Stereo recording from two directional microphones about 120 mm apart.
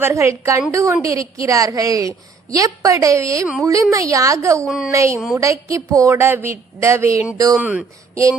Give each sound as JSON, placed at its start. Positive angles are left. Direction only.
{"t": 0.0, "sound": "a woman's voice", "side_deg": -25}
{"t": 4.6, "sound": "speech", "side_deg": -5}
{"t": 4.9, "sound": "a woman's voice", "side_deg": -25}
{"t": 7.6, "sound": "speech", "side_deg": -10}
{"t": 8.1, "sound": "a sound", "side_deg": -25}